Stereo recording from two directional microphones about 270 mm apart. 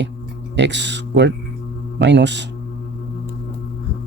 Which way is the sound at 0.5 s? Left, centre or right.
Right.